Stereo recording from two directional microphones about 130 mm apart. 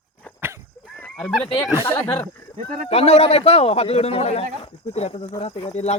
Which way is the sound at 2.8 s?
55° left (ahead or behind).